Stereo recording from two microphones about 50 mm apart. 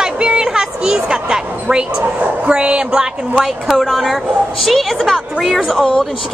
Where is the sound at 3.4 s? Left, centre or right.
Centre.